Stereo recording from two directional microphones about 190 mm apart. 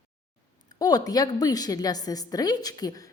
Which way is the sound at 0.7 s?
20° left (ahead or behind).